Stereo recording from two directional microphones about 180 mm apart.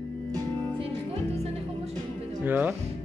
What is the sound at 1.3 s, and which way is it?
Music, 35° right (ahead or behind).